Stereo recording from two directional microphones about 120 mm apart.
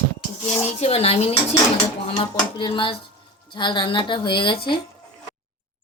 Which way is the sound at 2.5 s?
45° left (ahead or behind).